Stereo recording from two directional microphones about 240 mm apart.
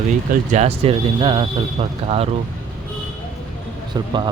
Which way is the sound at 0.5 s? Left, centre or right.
Right.